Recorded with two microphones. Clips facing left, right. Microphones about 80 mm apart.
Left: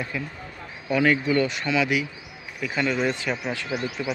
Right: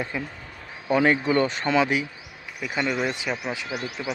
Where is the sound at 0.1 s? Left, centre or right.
Right.